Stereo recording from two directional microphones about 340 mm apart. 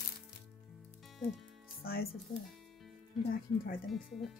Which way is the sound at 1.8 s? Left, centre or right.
Left.